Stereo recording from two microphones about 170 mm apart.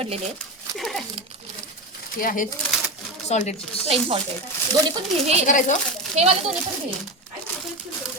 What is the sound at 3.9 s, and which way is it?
Speech, 35° right (ahead or behind).